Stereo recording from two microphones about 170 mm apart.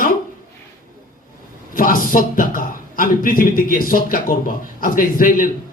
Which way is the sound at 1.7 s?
55° left (ahead or behind).